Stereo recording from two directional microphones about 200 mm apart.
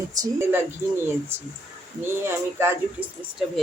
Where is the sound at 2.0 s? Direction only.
10° right (ahead or behind).